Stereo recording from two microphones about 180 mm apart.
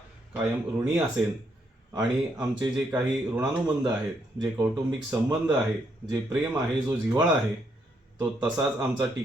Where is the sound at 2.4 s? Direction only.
20° right (ahead or behind).